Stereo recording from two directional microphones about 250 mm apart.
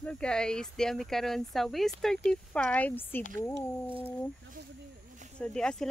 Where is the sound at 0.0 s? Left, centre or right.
Centre.